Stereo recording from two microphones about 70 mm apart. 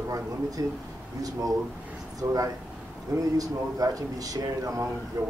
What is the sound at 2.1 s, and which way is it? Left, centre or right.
Speech, right.